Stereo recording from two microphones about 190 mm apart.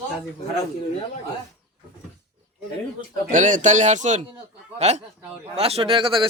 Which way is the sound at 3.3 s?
40° right (ahead or behind).